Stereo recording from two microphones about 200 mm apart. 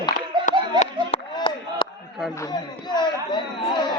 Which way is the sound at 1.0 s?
30° left (ahead or behind).